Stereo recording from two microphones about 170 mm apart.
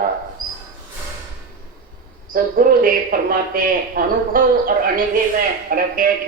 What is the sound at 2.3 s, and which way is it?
A man's voice, 55° right (ahead or behind).